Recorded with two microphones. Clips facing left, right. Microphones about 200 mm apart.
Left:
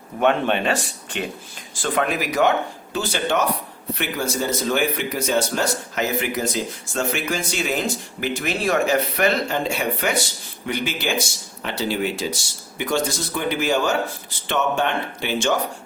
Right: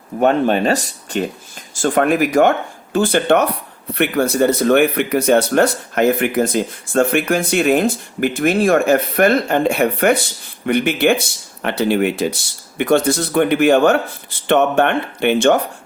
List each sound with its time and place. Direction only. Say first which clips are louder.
0.2 s speech: right 5 dB; 40° right (ahead or behind); by 15.5 s 60° right (ahead or behind)